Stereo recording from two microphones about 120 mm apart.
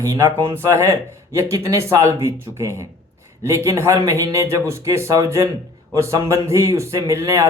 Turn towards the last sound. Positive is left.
turn(degrees=-25)  # may be behind; listen again after turning